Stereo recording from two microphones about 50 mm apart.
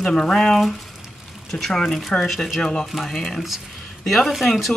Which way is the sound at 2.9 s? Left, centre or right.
Centre.